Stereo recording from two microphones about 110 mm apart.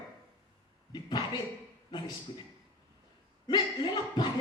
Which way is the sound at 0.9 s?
40° left (ahead or behind).